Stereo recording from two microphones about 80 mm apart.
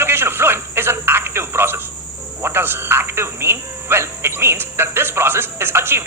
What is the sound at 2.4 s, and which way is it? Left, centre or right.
Speech, right.